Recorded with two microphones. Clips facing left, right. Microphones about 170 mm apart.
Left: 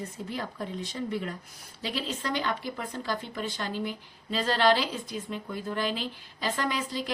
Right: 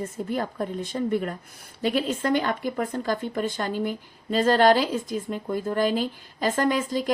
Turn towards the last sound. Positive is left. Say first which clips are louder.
# right 7 dB
turn(degrees=-45)  # may be behind; listen again after turning